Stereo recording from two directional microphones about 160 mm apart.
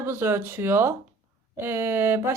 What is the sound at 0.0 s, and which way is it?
A woman's voice, 15° right (ahead or behind).